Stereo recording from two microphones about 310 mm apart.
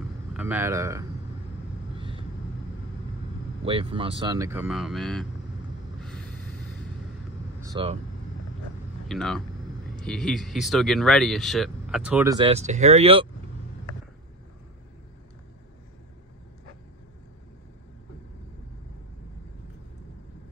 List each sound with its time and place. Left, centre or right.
0.3 s speech: centre
2.0 s vehicle: centre
3.6 s speech: centre
5.9 s a sound: centre
7.6 s speech: centre
9.0 s speech: centre